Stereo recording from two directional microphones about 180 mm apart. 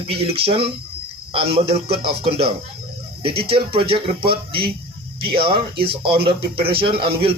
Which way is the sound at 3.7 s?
30° right (ahead or behind).